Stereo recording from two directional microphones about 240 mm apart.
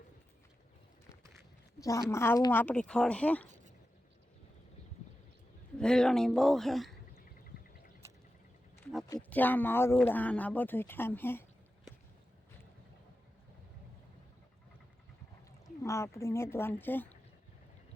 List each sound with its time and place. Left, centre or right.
1.8 s speech: centre
5.7 s speech: centre
9.1 s speech: centre
15.6 s speech: centre